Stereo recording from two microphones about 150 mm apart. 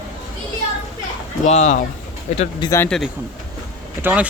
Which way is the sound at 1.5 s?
50° left (ahead or behind).